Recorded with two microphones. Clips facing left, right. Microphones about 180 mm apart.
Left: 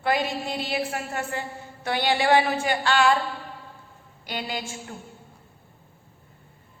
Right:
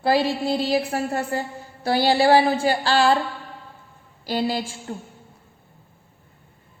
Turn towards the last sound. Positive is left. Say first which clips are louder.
# right 7 dB
turn(degrees=-30)  # may be behind; listen again after turning